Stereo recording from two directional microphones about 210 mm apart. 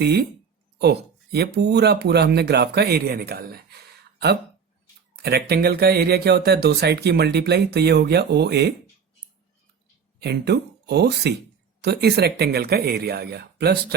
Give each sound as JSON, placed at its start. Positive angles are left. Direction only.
{"t": 0.0, "sound": "speech", "side_deg": -50}
{"t": 5.1, "sound": "speech", "side_deg": -50}
{"t": 10.2, "sound": "speech", "side_deg": -50}